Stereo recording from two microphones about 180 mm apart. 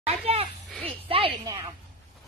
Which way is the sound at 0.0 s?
35° right (ahead or behind).